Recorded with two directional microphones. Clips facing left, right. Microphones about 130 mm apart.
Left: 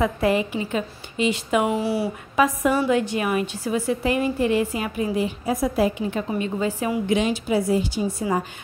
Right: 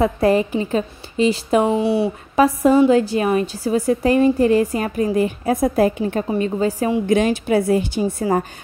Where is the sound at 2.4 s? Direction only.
35° right (ahead or behind).